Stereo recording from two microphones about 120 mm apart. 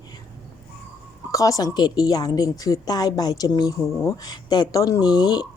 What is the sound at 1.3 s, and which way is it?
A woman's voice, 30° left (ahead or behind).